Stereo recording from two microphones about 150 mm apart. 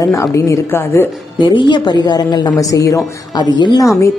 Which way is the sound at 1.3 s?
30° left (ahead or behind).